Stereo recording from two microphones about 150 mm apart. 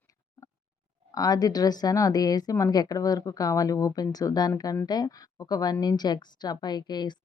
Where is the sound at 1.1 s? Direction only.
25° left (ahead or behind).